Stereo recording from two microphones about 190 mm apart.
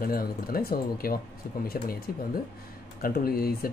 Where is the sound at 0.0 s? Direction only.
50° left (ahead or behind).